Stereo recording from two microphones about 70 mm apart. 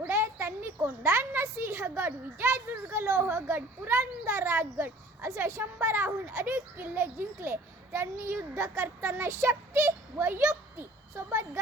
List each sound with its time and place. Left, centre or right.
0.1 s a child's voice: right